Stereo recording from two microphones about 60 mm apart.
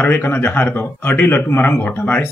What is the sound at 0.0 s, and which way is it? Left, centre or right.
Speech, left.